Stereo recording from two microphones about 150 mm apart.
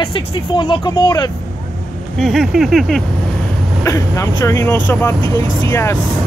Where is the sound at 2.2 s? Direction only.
Centre (ahead or behind).